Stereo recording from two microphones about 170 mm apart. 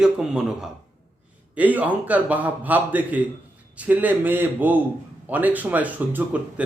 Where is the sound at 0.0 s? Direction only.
5° right (ahead or behind).